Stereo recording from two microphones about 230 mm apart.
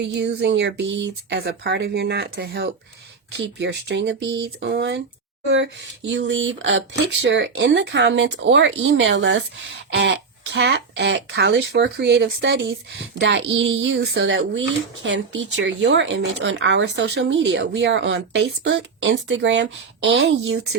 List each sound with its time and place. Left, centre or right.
0.0 s speech: right